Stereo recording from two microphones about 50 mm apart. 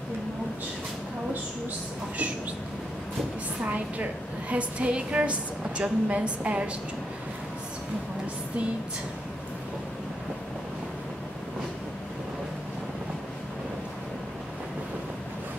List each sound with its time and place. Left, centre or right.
3.6 s a woman's voice: right